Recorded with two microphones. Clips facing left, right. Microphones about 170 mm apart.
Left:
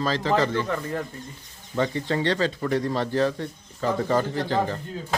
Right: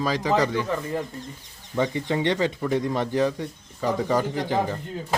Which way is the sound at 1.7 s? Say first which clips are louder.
Even; 15° right (ahead or behind).